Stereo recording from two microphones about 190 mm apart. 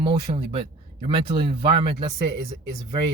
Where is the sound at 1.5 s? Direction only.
30° right (ahead or behind).